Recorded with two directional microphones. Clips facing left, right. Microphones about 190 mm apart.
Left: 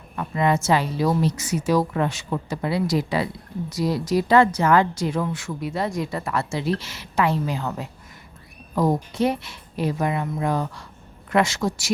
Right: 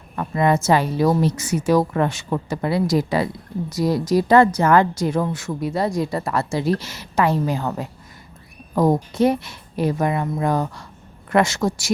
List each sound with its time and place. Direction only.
0.2 s a woman's voice: 45° right (ahead or behind)